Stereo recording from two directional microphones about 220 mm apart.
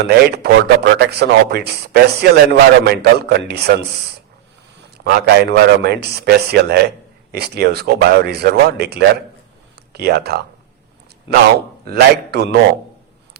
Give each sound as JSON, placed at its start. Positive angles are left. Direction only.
{"t": 0.1, "sound": "speech", "side_deg": -45}
{"t": 5.1, "sound": "speech", "side_deg": -45}
{"t": 11.9, "sound": "speech", "side_deg": -45}